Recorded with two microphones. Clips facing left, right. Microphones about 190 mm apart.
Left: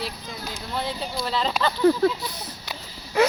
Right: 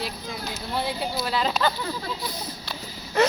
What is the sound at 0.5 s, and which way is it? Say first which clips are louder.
A woman's voice: right 1 dB; 5° right (ahead or behind).